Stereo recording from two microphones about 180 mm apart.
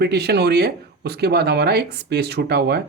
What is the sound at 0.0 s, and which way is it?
A man's voice, 65° right (ahead or behind).